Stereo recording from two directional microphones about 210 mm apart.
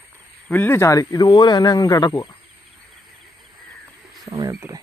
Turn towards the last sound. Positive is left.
turn(degrees=-15)  # may be behind; listen again after turning